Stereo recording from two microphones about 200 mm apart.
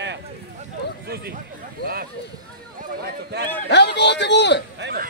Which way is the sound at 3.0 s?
55° right (ahead or behind).